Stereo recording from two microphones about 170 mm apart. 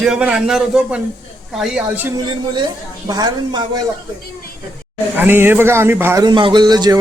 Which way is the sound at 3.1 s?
25° right (ahead or behind).